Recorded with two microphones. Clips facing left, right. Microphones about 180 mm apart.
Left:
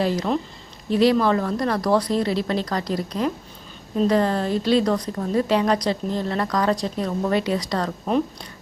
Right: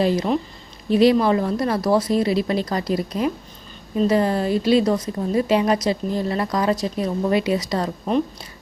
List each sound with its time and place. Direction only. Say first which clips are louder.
0.9 s speech: right 2 dB; 15° right (ahead or behind)
4.8 s a woman's voice: right 2 dB; 20° right (ahead or behind); by 8.4 s 5° right (ahead or behind)